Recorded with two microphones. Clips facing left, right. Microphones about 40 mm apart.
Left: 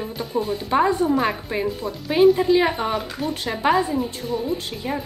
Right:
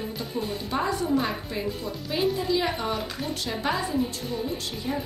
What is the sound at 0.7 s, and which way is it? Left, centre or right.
Speech, left.